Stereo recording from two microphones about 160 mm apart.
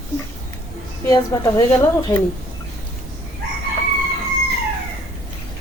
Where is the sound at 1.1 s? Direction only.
20° left (ahead or behind).